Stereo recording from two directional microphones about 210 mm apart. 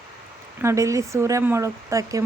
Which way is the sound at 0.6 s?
15° right (ahead or behind).